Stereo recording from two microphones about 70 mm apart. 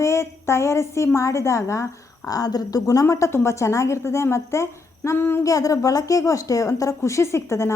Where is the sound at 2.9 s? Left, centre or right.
Left.